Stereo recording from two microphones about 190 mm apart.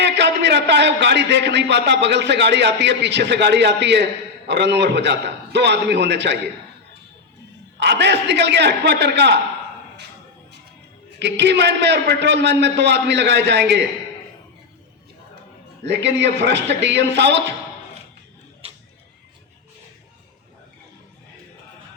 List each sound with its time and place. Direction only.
0.0 s a man's voice: 65° right (ahead or behind)
7.8 s a man's voice: 65° right (ahead or behind)
11.2 s a man's voice: 65° right (ahead or behind)
15.8 s a man's voice: 65° right (ahead or behind)